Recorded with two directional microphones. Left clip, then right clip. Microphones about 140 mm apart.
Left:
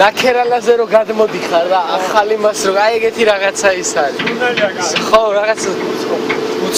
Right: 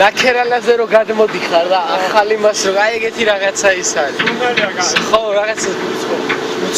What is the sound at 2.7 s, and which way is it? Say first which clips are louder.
Speech: left 2 dB; 30° left (ahead or behind).